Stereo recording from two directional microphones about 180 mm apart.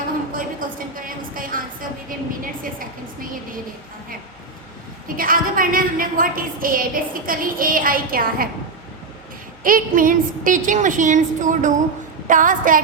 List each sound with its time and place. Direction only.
0.3 s a woman's voice: 50° right (ahead or behind)
5.0 s a woman's voice: 50° right (ahead or behind)
9.6 s a woman's voice: 50° right (ahead or behind)